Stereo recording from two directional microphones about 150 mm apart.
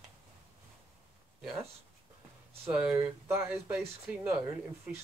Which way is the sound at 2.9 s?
15° right (ahead or behind).